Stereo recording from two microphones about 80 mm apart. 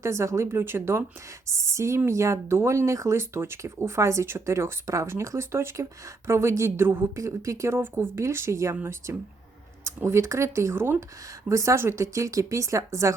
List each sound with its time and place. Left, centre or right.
0.0 s speech: right